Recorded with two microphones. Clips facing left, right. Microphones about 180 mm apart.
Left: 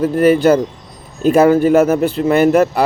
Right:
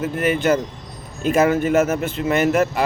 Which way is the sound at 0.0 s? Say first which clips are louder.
Left 9 dB; 35° left (ahead or behind).